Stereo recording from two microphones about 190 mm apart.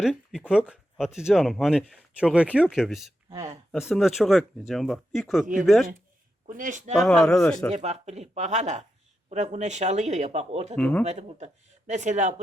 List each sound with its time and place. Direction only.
0.0 s speech: centre (ahead or behind)
3.2 s speech: 20° right (ahead or behind)
3.7 s speech: centre (ahead or behind)
6.4 s speech: 40° right (ahead or behind)
6.9 s speech: centre (ahead or behind)
7.7 s speech: 35° right (ahead or behind)
10.8 s speech: 5° left (ahead or behind)
11.0 s speech: 35° right (ahead or behind)